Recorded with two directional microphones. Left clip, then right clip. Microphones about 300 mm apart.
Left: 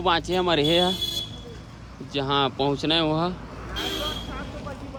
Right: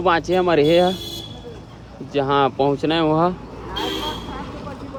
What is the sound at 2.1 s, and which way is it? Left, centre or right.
Speech, centre.